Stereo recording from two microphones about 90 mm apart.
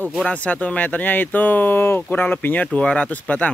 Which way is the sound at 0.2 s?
15° left (ahead or behind).